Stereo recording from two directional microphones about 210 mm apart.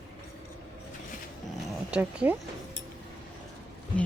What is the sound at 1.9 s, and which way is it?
Speech, 5° right (ahead or behind).